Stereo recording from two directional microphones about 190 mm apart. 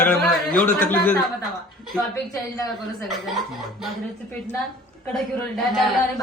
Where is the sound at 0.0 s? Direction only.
10° left (ahead or behind).